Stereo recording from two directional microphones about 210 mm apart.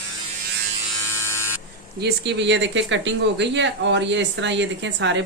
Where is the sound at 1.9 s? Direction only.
55° right (ahead or behind).